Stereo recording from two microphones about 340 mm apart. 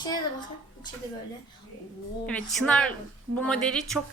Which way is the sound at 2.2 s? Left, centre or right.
Centre.